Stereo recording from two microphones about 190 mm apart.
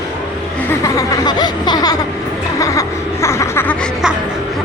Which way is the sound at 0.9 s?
20° left (ahead or behind).